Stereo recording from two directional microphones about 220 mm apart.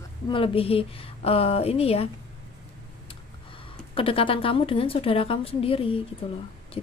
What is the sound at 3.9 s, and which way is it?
A woman's voice, 25° left (ahead or behind).